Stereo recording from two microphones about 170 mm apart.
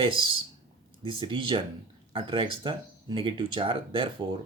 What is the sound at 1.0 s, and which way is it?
Speech, 30° right (ahead or behind).